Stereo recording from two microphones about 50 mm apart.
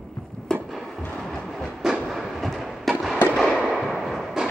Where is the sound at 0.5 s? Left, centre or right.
Centre.